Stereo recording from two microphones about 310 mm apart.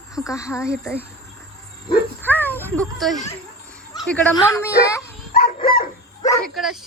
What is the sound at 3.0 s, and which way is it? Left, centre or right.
Speech, centre.